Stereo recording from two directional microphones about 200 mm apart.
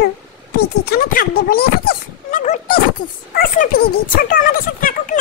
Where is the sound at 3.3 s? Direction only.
45° left (ahead or behind).